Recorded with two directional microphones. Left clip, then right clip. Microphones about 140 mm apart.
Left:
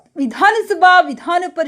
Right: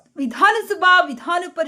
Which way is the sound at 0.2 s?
15° left (ahead or behind).